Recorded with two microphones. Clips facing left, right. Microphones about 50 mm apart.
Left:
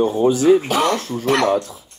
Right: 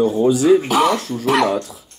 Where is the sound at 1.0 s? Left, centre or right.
Left.